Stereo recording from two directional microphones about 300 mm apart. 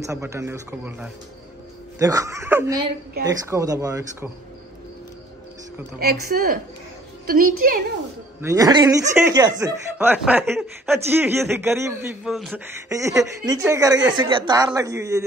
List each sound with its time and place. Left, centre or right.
0.0 s speech: centre
6.2 s a woman's voice: right
8.4 s speech: centre
12.9 s speech: centre